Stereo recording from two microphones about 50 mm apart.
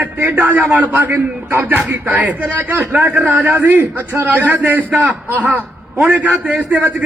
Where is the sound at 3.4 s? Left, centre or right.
Right.